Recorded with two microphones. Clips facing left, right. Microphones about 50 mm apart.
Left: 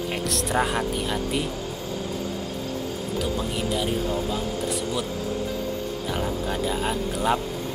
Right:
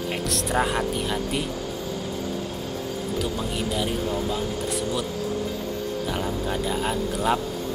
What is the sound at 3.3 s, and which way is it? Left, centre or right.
Speech, centre.